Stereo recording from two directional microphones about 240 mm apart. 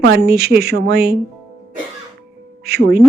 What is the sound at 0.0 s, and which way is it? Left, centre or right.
A woman's voice, right.